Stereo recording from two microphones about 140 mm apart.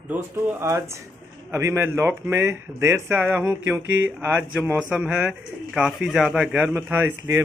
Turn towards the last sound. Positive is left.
turn(degrees=-15)  # may be behind; listen again after turning